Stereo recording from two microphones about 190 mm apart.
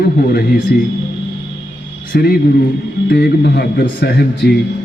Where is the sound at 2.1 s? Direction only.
55° left (ahead or behind).